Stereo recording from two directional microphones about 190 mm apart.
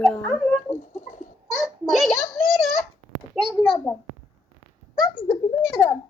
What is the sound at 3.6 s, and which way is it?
Speech, 15° left (ahead or behind).